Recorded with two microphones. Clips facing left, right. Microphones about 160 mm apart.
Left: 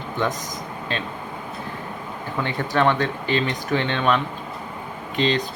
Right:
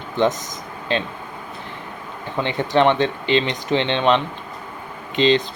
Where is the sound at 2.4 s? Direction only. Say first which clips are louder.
Right 4 dB; 25° right (ahead or behind).